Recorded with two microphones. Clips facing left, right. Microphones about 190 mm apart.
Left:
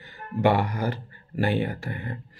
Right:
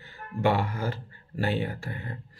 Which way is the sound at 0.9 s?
55° left (ahead or behind).